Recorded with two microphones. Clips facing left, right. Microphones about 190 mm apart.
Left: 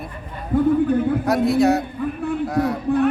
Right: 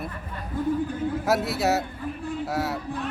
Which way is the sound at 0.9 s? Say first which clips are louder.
Left 9 dB; 60° left (ahead or behind).